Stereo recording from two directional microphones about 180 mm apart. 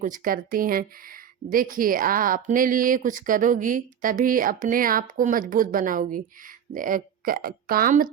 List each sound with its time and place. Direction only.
0.0 s a woman's voice: 50° right (ahead or behind)